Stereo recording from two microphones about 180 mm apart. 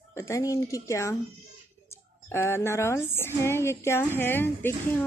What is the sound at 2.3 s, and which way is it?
A woman's voice, 15° left (ahead or behind).